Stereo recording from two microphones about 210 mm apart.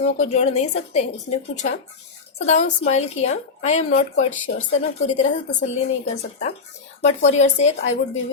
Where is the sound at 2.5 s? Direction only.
30° left (ahead or behind).